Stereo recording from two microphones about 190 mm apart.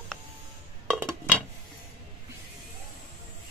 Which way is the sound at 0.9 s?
5° right (ahead or behind).